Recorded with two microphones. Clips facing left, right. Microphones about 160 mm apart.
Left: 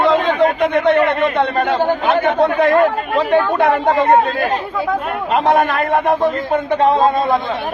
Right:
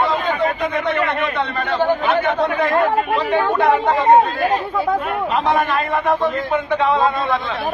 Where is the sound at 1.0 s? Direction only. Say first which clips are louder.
Left 5 dB; 50° left (ahead or behind).